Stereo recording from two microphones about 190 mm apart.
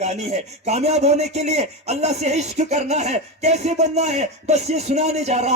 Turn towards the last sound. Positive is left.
turn(degrees=-35)  # may be behind; listen again after turning